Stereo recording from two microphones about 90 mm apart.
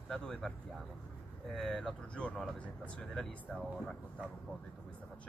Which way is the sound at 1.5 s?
5° left (ahead or behind).